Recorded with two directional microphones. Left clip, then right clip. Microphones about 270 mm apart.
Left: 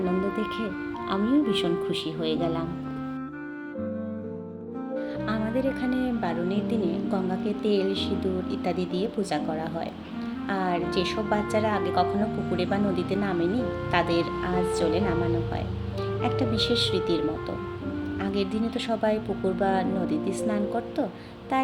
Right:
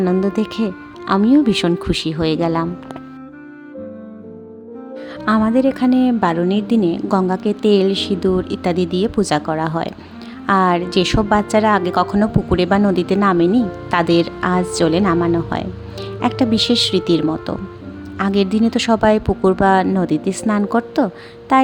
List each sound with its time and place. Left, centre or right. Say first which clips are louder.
0.3 s a woman's voice: right 8 dB; right
5.2 s a woman's voice: right 14 dB; right